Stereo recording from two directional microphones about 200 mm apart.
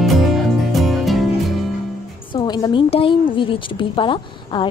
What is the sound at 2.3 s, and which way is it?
Speech, 20° left (ahead or behind).